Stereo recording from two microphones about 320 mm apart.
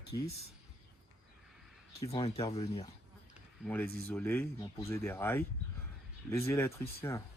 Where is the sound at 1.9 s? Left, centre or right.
Centre.